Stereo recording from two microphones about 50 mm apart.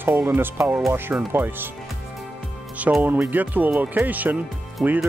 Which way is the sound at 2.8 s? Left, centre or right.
Right.